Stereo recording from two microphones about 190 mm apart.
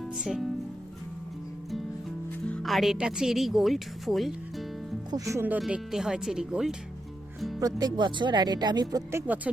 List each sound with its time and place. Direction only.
0.0 s music: centre (ahead or behind)
2.5 s a woman's voice: centre (ahead or behind)
5.1 s speech: 15° right (ahead or behind)
7.6 s speech: 20° right (ahead or behind)
9.2 s speech: 10° right (ahead or behind)